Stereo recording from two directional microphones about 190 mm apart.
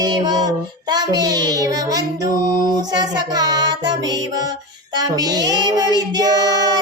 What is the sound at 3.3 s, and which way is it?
Child singing, 20° right (ahead or behind).